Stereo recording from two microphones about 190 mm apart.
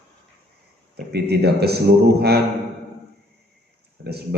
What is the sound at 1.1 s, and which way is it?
A man's voice, 60° right (ahead or behind).